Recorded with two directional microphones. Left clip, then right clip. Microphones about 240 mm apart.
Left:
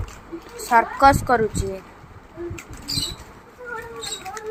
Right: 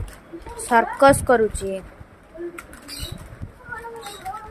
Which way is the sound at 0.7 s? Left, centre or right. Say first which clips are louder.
Even; right.